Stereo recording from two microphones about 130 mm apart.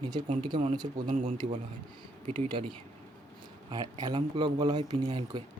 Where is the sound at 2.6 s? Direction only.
45° right (ahead or behind).